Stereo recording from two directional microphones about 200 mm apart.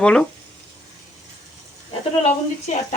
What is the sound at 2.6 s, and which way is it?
Speech, 35° left (ahead or behind).